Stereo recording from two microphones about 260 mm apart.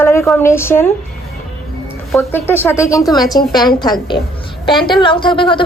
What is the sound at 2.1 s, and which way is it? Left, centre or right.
A woman's voice, centre.